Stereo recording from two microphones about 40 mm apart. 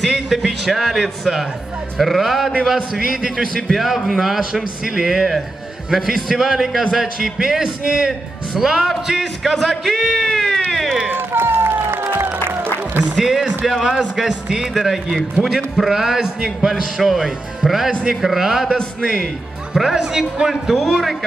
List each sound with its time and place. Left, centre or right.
0.0 s a man's voice: centre
2.0 s music: centre
2.6 s a man's voice: centre
3.5 s music: centre
4.4 s a man's voice: centre
5.9 s music: centre
6.9 s a man's voice: centre
9.2 s music: centre
11.1 s music: right
13.2 s a man's voice: centre
16.4 s music: centre
18.2 s a man's voice: centre
19.7 s speech: centre
20.0 s a man's voice: centre